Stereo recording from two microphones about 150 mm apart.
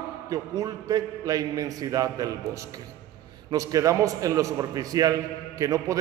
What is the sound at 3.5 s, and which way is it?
A man's voice, 25° right (ahead or behind).